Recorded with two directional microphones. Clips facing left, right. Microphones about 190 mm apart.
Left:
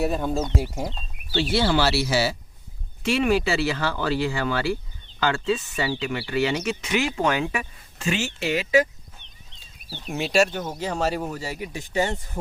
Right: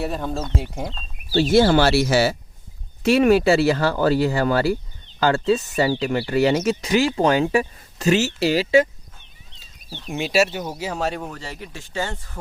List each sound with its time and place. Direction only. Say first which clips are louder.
0.0 s speech: left 2 dB; 5° left (ahead or behind)
1.3 s speech: right 7 dB; 40° right (ahead or behind)
3.0 s speech: right 6 dB; 40° right (ahead or behind)
9.9 s speech: right 1 dB; 5° left (ahead or behind); by 12.4 s 20° left (ahead or behind)